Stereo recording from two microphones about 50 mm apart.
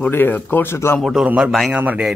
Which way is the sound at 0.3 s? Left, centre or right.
Left.